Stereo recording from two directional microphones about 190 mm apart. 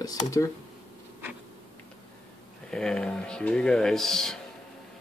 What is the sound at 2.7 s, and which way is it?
Speech, 5° left (ahead or behind).